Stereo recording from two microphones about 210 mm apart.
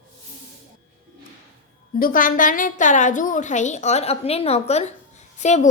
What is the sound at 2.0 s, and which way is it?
A woman's voice, 40° left (ahead or behind).